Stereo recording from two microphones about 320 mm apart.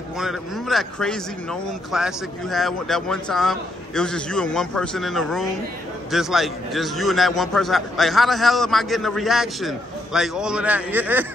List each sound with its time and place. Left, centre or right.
0.2 s speech: centre